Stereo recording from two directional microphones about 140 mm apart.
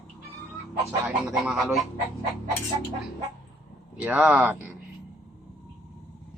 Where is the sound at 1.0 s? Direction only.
5° right (ahead or behind).